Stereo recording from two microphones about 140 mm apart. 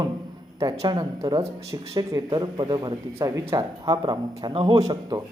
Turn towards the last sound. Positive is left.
turn(degrees=-25)  # may be behind; listen again after turning